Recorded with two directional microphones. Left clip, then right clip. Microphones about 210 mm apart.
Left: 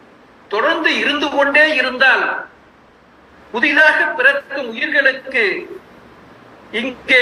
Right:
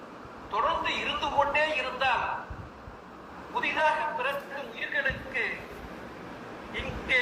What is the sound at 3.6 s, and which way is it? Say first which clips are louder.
A man's voice: left 14 dB; 55° left (ahead or behind).